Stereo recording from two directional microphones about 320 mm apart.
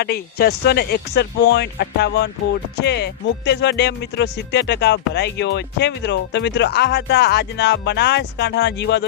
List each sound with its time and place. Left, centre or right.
0.0 s speech: left